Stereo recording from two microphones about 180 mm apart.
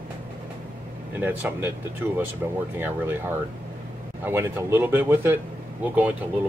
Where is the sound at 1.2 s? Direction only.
10° right (ahead or behind).